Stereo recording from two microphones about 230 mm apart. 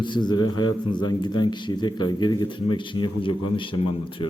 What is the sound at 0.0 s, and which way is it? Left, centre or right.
A man's voice, centre.